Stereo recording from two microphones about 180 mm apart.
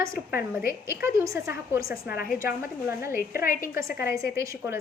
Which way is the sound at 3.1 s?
55° left (ahead or behind).